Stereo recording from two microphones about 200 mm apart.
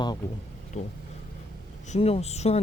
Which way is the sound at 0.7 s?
35° left (ahead or behind).